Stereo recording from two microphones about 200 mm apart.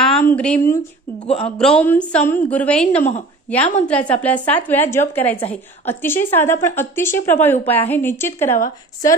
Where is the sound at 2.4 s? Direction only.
5° left (ahead or behind).